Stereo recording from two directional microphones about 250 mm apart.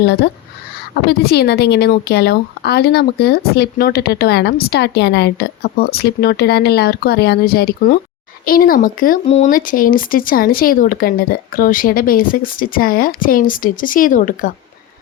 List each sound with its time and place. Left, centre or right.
0.0 s a woman's voice: left